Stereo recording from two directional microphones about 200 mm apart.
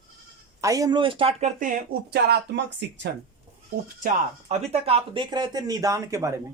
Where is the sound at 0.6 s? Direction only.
15° right (ahead or behind); by 3.1 s 60° right (ahead or behind).